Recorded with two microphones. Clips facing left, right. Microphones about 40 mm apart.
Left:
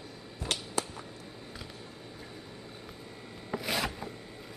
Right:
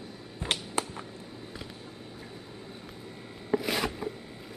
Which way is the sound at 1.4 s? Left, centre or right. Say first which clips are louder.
Right 2 dB; centre.